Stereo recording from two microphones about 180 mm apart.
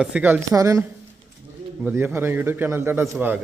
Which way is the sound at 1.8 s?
5° right (ahead or behind).